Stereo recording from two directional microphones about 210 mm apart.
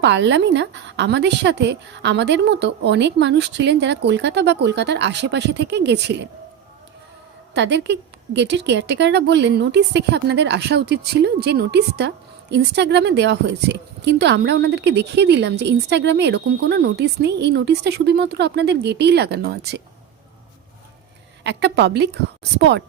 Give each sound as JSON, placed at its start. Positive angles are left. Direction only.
{"t": 0.0, "sound": "a woman's voice", "side_deg": -55}
{"t": 7.5, "sound": "speech", "side_deg": -55}
{"t": 21.4, "sound": "a woman's voice", "side_deg": -55}